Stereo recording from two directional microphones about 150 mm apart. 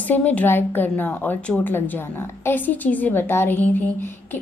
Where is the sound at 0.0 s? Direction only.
10° left (ahead or behind).